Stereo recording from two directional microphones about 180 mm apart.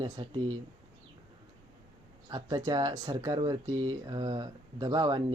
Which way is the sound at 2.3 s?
20° right (ahead or behind).